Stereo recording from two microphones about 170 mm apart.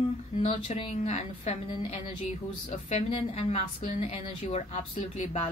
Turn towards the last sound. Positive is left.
turn(degrees=40)  # may be behind; listen again after turning